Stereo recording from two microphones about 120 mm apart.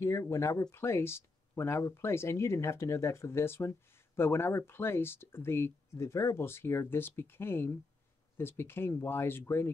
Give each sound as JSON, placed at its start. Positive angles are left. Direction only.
{"t": 0.0, "sound": "speech", "side_deg": 25}